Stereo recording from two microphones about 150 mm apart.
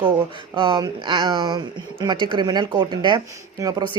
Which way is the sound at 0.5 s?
30° right (ahead or behind).